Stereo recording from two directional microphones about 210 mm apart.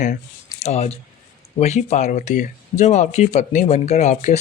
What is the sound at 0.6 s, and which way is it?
Speech, 30° left (ahead or behind).